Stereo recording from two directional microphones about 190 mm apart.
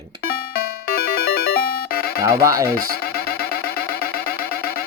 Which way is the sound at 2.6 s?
55° left (ahead or behind).